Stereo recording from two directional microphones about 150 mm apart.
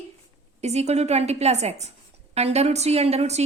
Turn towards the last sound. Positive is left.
turn(degrees=-45)  # may be behind; listen again after turning